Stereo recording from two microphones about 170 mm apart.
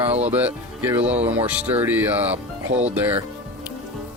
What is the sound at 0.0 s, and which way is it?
Speech, 35° right (ahead or behind).